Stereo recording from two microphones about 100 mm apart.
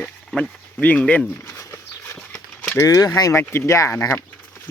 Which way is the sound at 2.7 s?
35° left (ahead or behind).